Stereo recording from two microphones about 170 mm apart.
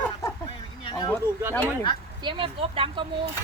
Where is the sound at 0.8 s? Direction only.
25° left (ahead or behind).